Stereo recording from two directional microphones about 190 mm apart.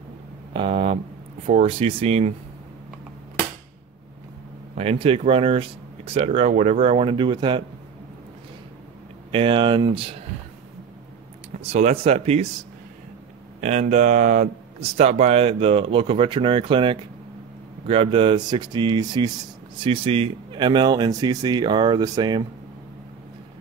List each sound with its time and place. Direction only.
0.5 s a sound: 30° right (ahead or behind)
1.5 s speech: 30° right (ahead or behind)
4.7 s speech: 30° right (ahead or behind)
9.3 s speech: 25° right (ahead or behind)
11.6 s speech: 35° right (ahead or behind)
13.6 s speech: 35° right (ahead or behind); by 22.4 s 20° right (ahead or behind)